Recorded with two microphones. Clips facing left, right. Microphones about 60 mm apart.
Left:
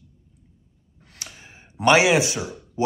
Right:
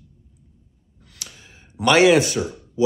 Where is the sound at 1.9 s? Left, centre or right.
Centre.